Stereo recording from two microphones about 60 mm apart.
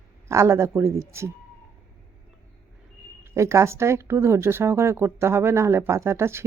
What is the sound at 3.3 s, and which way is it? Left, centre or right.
Speech, right.